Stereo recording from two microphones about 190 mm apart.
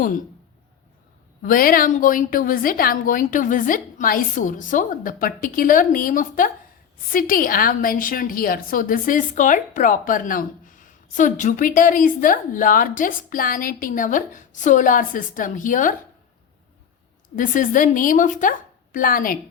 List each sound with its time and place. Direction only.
1.4 s a woman's voice: 50° left (ahead or behind)
17.3 s a woman's voice: 45° left (ahead or behind)